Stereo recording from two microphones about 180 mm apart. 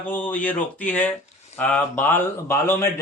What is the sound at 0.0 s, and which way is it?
A man's voice, 10° left (ahead or behind).